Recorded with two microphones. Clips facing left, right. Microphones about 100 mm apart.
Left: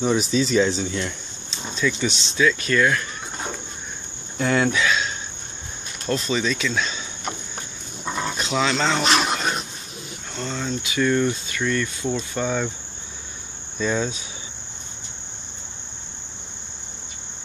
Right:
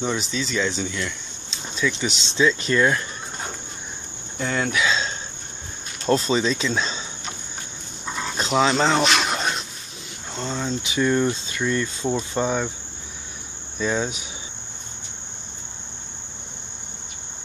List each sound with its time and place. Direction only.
0.0 s speech: 15° left (ahead or behind)
1.5 s speech: centre (ahead or behind)
2.2 s speech: 25° right (ahead or behind)
4.4 s cricket: centre (ahead or behind)
4.8 s cricket: 30° right (ahead or behind)
6.0 s speech: 30° right (ahead or behind)
8.4 s a sound: 30° right (ahead or behind)
8.9 s speech: centre (ahead or behind)
10.3 s speech: 30° right (ahead or behind)
13.7 s cricket: 10° right (ahead or behind)